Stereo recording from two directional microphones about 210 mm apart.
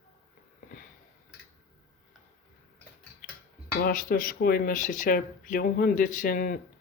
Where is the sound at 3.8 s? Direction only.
40° left (ahead or behind).